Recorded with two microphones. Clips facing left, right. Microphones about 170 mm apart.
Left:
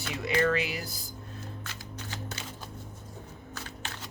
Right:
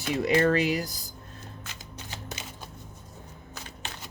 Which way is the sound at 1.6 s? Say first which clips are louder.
Left 2 dB; 15° right (ahead or behind).